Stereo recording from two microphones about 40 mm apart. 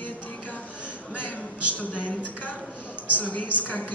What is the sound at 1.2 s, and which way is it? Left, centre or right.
A woman's voice, left.